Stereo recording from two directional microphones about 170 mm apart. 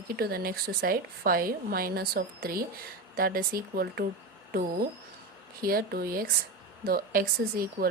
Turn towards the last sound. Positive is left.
turn(degrees=-60)  # may be behind; listen again after turning